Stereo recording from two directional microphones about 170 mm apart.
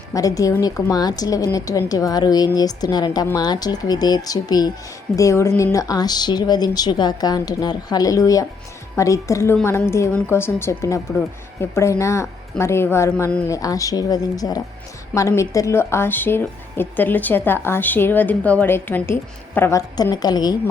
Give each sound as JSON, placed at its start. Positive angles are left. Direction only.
{"t": 0.1, "sound": "a woman's voice", "side_deg": 20}